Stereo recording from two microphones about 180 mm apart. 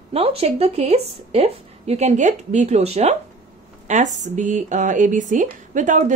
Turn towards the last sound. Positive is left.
turn(degrees=-45)  # may be behind; listen again after turning